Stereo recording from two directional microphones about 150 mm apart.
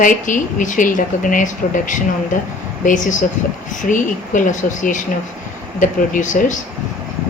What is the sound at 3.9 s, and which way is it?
Speech, 60° left (ahead or behind).